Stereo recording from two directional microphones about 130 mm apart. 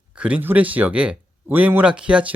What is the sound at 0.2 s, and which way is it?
Speech, 10° right (ahead or behind).